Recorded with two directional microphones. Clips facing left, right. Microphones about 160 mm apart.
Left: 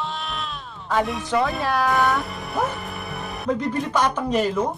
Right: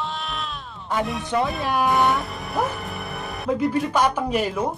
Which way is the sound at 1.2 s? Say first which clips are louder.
Left 1 dB; 20° right (ahead or behind).